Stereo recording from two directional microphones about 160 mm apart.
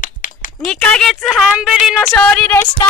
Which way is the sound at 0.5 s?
5° left (ahead or behind).